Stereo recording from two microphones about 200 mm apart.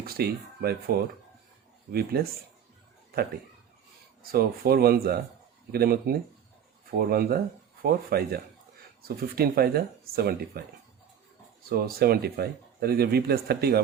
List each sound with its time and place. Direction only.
0.0 s speech: 50° right (ahead or behind)
4.2 s speech: 50° right (ahead or behind)
11.7 s speech: 50° right (ahead or behind)